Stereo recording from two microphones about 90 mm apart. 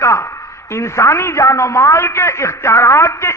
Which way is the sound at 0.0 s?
30° left (ahead or behind).